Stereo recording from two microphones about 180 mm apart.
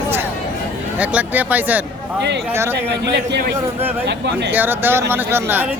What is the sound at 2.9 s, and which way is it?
A man's voice, 70° right (ahead or behind).